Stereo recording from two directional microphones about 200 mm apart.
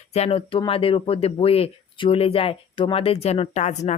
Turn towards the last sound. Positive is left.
turn(degrees=35)  # may be behind; listen again after turning